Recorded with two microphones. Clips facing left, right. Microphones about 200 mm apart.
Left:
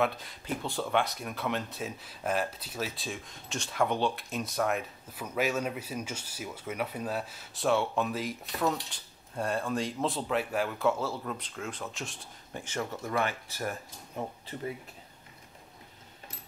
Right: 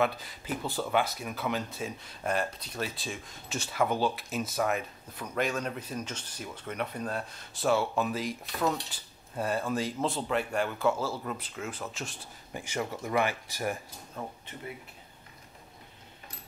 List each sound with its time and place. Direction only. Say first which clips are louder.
0.0 s speech: right 1 dB; centre (ahead or behind)
12.6 s speech: right 1 dB; 10° right (ahead or behind)
14.2 s speech: left 3 dB; 20° left (ahead or behind)